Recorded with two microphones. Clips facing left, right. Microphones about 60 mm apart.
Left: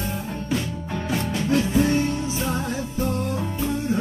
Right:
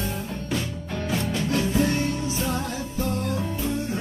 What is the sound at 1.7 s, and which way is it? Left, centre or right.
Music, centre.